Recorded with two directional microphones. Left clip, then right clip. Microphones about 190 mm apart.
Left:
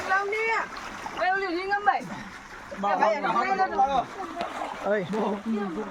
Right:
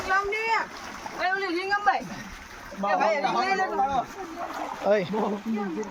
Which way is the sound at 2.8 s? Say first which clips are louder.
Even; 35° right (ahead or behind).